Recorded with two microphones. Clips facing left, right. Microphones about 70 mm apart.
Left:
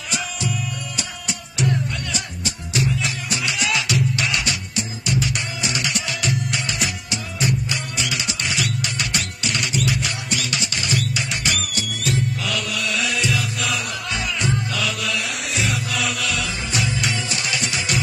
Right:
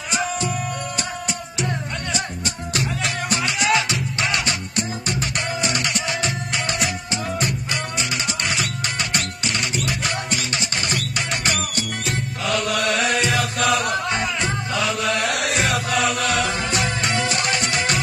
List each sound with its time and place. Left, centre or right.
3.4 s music: right
7.3 s music: right
14.4 s music: right
15.1 s music: right